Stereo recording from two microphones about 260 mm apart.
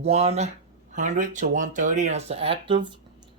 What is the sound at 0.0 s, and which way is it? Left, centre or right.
Speech, right.